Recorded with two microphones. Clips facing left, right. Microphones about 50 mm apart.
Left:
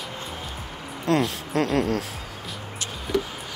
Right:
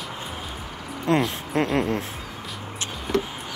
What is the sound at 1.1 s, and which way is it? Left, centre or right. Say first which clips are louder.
Speech: even; right.